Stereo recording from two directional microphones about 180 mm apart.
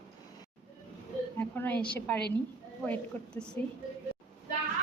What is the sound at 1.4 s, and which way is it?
A woman's voice, 10° left (ahead or behind).